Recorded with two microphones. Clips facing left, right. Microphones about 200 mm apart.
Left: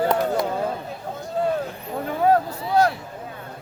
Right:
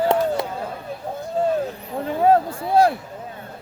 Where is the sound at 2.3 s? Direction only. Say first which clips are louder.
Right 3 dB; 30° right (ahead or behind).